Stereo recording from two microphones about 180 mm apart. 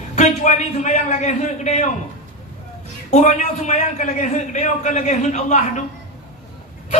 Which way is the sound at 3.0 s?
40° left (ahead or behind).